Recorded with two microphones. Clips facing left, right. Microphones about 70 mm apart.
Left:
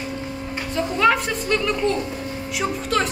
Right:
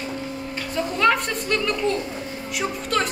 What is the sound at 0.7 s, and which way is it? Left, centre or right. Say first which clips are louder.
A woman's voice: left 2 dB; centre.